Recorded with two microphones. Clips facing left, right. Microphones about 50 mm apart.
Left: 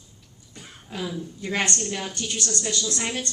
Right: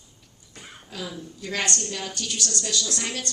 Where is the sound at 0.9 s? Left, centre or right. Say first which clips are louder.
Left 4 dB; left.